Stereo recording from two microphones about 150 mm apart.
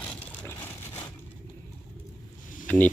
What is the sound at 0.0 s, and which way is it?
Vehicle, 10° left (ahead or behind).